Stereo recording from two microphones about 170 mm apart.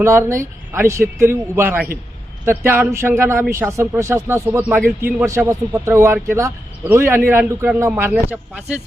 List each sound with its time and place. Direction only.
0.0 s a man's voice: 15° right (ahead or behind)